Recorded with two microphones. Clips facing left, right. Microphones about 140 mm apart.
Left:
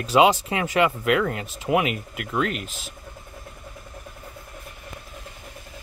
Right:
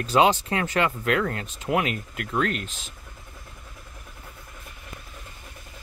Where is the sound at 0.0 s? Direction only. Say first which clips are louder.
Left 2 dB; 10° left (ahead or behind).